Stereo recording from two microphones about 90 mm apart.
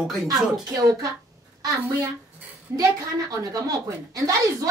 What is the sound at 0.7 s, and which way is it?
Speech, 40° right (ahead or behind).